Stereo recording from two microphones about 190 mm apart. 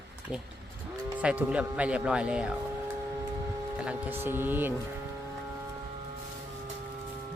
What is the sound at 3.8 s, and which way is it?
Speech, 5° right (ahead or behind).